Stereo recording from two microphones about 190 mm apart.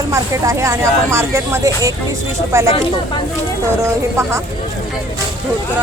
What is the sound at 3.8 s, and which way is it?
Speech, 15° right (ahead or behind).